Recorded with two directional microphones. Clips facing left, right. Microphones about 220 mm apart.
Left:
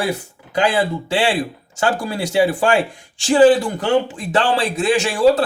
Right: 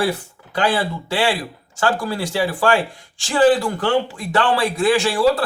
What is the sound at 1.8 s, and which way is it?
A man's voice, 20° left (ahead or behind).